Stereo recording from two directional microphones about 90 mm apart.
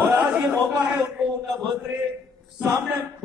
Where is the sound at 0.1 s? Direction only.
5° right (ahead or behind).